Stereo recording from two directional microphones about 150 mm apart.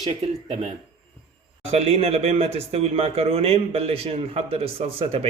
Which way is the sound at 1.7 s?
45° right (ahead or behind).